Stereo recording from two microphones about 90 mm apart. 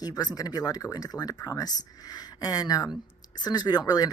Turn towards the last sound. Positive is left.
turn(degrees=45)  # may be behind; listen again after turning